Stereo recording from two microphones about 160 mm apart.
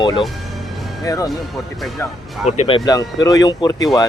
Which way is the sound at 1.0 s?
20° left (ahead or behind).